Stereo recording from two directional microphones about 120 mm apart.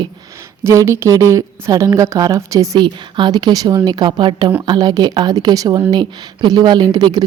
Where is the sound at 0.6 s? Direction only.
25° right (ahead or behind).